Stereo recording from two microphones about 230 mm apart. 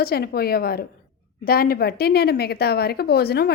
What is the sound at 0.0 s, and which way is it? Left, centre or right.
A woman's voice, left.